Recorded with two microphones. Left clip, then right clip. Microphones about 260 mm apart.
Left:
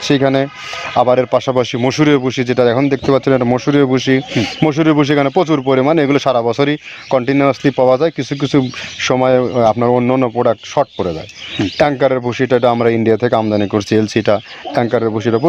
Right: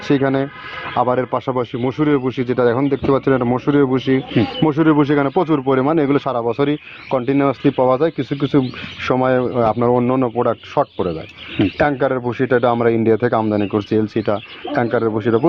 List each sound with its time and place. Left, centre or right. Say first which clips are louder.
0.0 s speech: left 4 dB; left